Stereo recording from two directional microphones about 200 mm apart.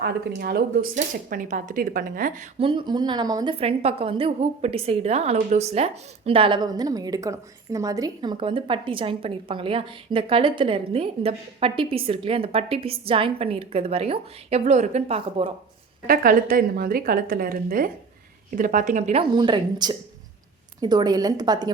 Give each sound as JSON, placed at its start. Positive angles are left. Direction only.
{"t": 0.0, "sound": "speech", "side_deg": -55}
{"t": 2.6, "sound": "a woman's voice", "side_deg": -25}
{"t": 3.6, "sound": "a woman's voice", "side_deg": -30}
{"t": 16.0, "sound": "a woman's voice", "side_deg": -45}
{"t": 19.3, "sound": "a woman's voice", "side_deg": -25}